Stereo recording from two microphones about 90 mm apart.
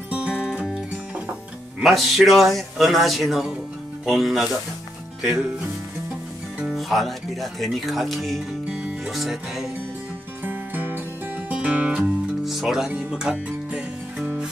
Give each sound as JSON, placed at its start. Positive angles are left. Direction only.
{"t": 0.1, "sound": "music", "side_deg": -10}
{"t": 1.8, "sound": "speech", "side_deg": 0}
{"t": 6.6, "sound": "speech", "side_deg": 0}
{"t": 10.4, "sound": "music", "side_deg": -20}
{"t": 12.0, "sound": "music", "side_deg": 0}